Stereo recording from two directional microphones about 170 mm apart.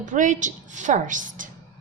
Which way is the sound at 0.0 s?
45° right (ahead or behind).